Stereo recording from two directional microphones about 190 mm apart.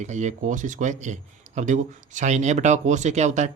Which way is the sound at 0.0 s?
40° right (ahead or behind).